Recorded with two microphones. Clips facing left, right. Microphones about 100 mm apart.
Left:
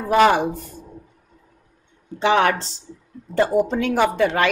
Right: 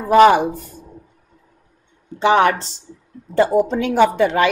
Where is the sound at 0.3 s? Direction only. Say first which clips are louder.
Right 3 dB; 15° right (ahead or behind).